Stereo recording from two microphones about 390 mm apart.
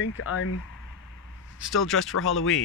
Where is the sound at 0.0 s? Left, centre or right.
Left.